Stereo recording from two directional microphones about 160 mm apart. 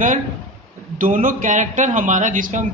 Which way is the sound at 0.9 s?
55° right (ahead or behind).